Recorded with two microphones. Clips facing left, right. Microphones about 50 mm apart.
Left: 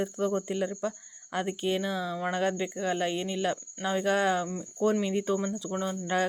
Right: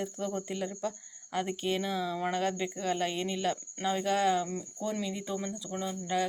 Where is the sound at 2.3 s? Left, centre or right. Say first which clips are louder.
Left 3 dB; left.